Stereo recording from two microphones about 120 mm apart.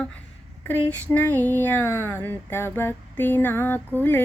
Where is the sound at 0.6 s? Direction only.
15° left (ahead or behind).